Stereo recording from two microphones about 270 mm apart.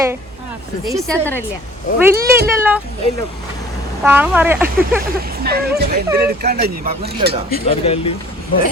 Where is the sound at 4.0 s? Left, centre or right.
Centre.